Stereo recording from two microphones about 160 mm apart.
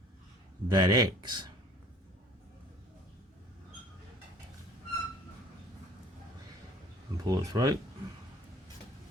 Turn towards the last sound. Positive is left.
turn(degrees=-25)  # may be behind; listen again after turning